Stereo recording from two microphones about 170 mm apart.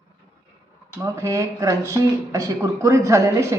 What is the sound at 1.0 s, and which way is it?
Speech, 20° right (ahead or behind).